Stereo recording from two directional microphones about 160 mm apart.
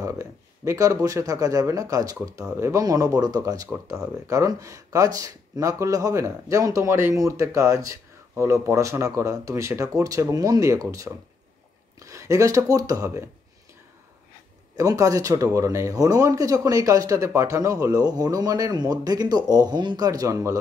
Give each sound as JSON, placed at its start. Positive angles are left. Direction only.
{"t": 0.0, "sound": "speech", "side_deg": -20}
{"t": 14.8, "sound": "speech", "side_deg": -20}